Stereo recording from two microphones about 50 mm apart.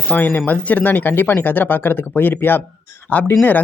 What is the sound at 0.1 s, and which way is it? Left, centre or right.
Speech, left.